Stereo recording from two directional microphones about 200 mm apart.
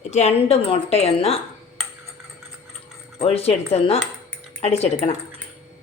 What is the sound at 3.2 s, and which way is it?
Speech, 30° left (ahead or behind).